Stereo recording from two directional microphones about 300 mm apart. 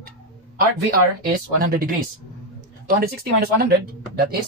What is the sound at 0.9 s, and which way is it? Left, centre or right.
Speech, right.